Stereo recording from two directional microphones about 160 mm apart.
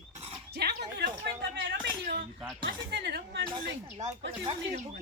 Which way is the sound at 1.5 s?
75° right (ahead or behind).